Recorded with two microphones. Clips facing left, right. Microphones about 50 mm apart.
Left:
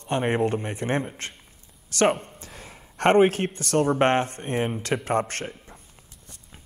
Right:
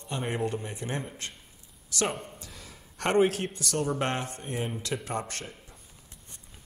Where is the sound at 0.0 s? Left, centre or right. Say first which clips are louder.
Left 8 dB; left.